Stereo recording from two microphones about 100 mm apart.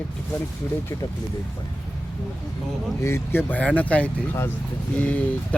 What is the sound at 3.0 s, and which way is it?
Speech, 25° left (ahead or behind).